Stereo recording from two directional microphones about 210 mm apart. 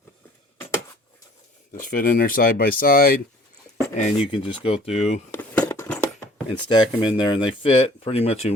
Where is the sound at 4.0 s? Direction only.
30° left (ahead or behind).